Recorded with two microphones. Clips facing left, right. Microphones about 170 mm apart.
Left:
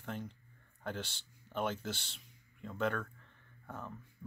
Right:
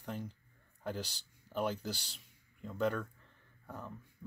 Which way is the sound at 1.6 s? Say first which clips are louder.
Right 1 dB; centre (ahead or behind).